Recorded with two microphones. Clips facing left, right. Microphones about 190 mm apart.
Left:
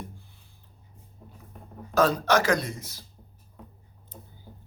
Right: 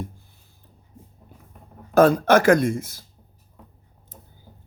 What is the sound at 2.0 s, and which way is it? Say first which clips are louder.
Speech: right 7 dB; 50° right (ahead or behind).